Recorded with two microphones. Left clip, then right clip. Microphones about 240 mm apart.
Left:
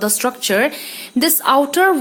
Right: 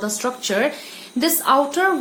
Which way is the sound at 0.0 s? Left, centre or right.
Left.